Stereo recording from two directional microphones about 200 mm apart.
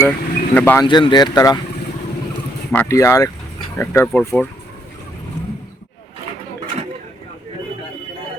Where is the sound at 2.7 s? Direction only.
10° left (ahead or behind).